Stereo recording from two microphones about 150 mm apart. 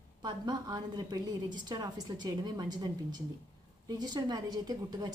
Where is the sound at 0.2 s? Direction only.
25° right (ahead or behind).